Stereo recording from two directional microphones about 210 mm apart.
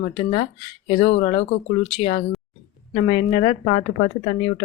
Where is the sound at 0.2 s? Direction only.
25° left (ahead or behind).